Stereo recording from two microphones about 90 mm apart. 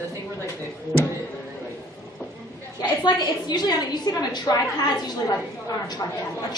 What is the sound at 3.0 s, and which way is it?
A woman's voice, 50° left (ahead or behind).